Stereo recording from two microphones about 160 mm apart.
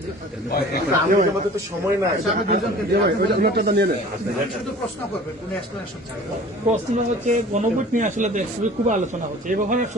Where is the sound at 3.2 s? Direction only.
80° right.